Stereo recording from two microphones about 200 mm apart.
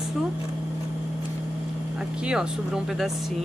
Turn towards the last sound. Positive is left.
turn(degrees=0)  # may be behind; listen again after turning